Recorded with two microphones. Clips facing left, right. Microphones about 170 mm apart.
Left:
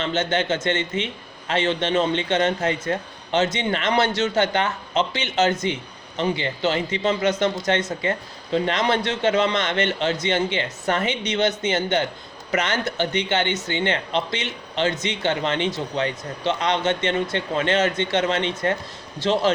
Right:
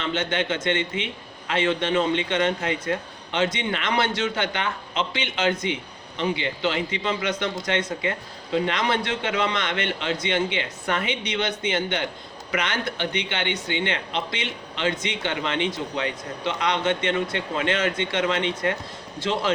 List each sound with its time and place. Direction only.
0.0 s speech: 40° left (ahead or behind)